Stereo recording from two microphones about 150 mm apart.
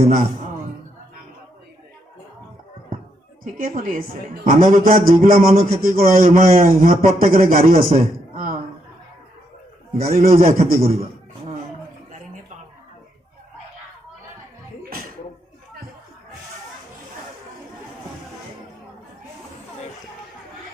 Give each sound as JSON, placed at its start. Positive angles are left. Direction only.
{"t": 3.4, "sound": "a woman's voice", "side_deg": -65}
{"t": 10.0, "sound": "a man's voice", "side_deg": -70}